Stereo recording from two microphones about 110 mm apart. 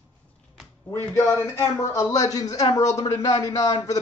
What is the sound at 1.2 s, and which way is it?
Speech, 25° left (ahead or behind).